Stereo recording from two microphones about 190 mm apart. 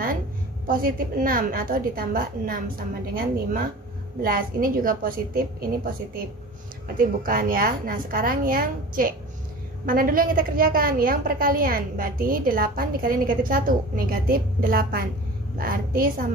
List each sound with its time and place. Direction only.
0.7 s a woman's voice: 50° right (ahead or behind)